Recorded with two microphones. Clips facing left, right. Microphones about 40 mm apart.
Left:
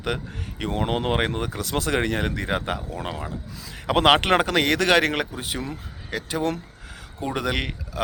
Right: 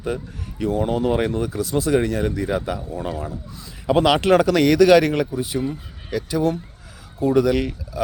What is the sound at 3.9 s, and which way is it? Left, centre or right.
Speech, left.